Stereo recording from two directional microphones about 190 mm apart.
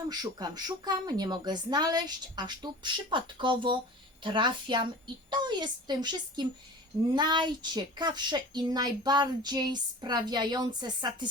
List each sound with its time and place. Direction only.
0.1 s speech: 20° right (ahead or behind)